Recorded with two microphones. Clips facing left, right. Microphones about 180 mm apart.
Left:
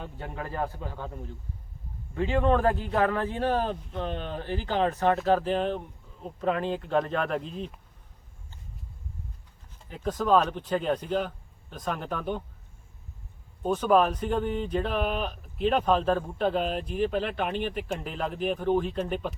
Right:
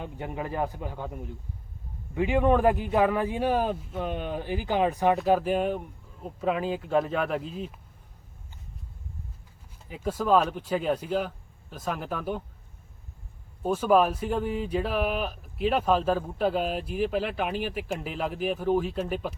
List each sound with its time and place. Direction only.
0.0 s a man's voice: 15° right (ahead or behind)
9.9 s speech: 10° right (ahead or behind)
13.6 s speech: 5° right (ahead or behind)